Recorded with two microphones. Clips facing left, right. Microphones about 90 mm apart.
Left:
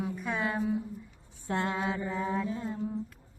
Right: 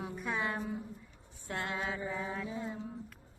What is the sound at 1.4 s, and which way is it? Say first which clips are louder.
Mantra: left 6 dB; 30° left (ahead or behind).